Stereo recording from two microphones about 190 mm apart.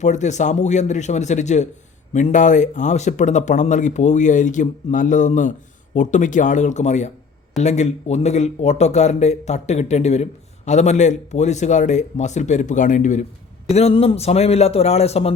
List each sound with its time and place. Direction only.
0.0 s speech: 40° left (ahead or behind)